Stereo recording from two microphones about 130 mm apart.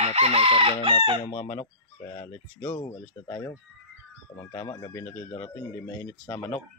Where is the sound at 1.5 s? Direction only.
35° left (ahead or behind).